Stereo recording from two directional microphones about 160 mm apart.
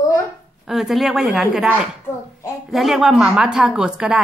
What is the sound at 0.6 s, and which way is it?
Speech, 5° right (ahead or behind).